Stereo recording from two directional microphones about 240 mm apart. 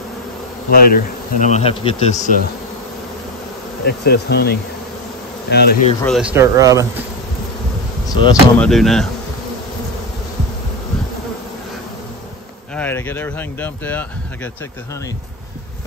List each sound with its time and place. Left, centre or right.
0.7 s speech: left
3.8 s speech: left
6.0 s speech: centre
6.3 s speech: centre
8.1 s speech: centre
8.6 s speech: centre
12.7 s speech: centre